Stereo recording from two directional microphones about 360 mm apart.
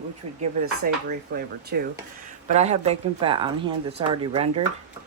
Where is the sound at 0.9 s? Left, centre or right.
Right.